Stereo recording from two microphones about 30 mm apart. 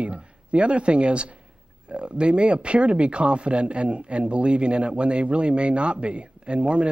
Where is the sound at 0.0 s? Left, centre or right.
Right.